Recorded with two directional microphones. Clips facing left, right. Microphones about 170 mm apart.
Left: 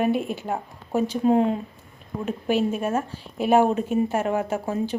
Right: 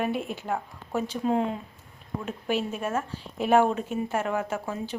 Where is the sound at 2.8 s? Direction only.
30° left (ahead or behind).